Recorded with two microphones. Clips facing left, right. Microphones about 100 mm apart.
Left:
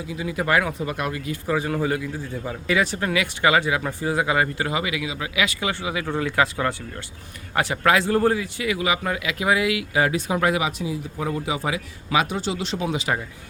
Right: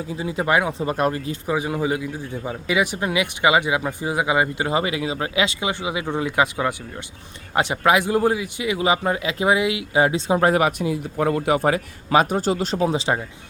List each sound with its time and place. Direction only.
0.1 s a man's voice: 30° right (ahead or behind)
1.5 s a man's voice: 15° right (ahead or behind)
4.7 s a man's voice: 35° right (ahead or behind)
10.5 s a man's voice: 55° right (ahead or behind); by 13.1 s 30° right (ahead or behind)